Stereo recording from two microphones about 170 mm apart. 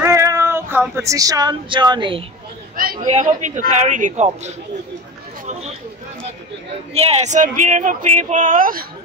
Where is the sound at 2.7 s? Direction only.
55° right (ahead or behind).